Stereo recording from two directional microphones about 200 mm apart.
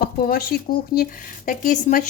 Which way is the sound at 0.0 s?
45° left (ahead or behind).